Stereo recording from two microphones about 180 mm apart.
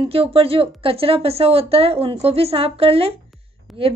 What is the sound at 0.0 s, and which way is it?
A woman's voice, 30° right (ahead or behind).